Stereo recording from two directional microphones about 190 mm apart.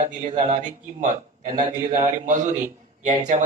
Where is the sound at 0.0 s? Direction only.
40° right (ahead or behind).